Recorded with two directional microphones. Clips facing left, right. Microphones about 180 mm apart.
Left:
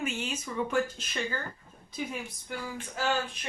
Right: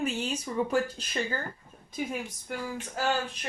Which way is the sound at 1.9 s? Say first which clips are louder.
Right 3 dB; 50° right (ahead or behind).